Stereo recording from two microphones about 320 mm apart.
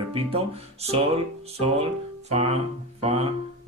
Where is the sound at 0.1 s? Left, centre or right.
Centre.